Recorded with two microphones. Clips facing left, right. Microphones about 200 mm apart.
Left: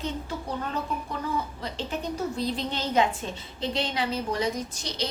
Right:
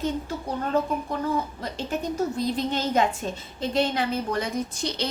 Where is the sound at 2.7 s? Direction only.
45° right (ahead or behind).